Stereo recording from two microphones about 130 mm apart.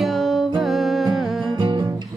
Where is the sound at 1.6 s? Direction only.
35° right (ahead or behind).